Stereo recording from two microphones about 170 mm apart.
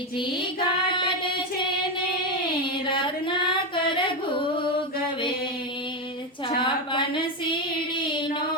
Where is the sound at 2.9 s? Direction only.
30° left (ahead or behind).